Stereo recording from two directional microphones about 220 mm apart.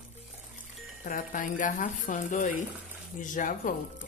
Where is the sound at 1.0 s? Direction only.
35° left (ahead or behind).